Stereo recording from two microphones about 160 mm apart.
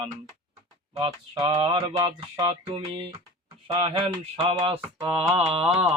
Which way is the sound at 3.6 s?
35° right (ahead or behind).